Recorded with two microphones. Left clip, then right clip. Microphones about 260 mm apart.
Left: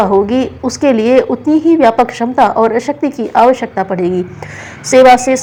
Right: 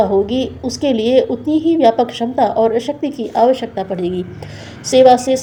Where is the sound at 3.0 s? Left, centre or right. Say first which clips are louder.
Left 5 dB; left.